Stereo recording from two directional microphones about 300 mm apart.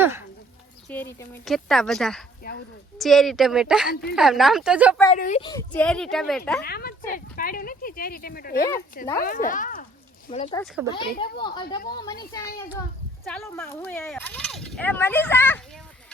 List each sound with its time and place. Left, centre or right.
0.0 s a sound: centre
0.9 s speech: centre
5.1 s speech: left; by 6.6 s centre
6.6 s a woman's voice: left; by 11.8 s centre
13.2 s speech: centre